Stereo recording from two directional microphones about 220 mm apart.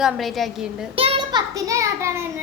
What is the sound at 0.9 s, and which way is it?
Child singing, 25° right (ahead or behind).